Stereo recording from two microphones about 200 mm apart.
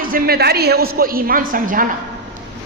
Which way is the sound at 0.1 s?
50° right (ahead or behind).